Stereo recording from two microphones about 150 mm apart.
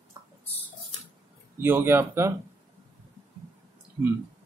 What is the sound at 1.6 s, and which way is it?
Speech, 15° right (ahead or behind).